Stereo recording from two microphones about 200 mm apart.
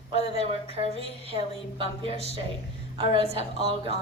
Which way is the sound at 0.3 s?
30° right (ahead or behind).